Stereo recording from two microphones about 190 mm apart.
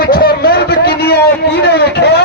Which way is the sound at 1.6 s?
60° left (ahead or behind).